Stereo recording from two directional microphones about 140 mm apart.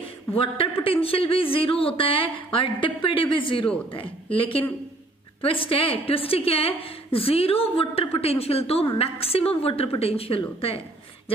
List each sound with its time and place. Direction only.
0.3 s a woman's voice: 40° left (ahead or behind)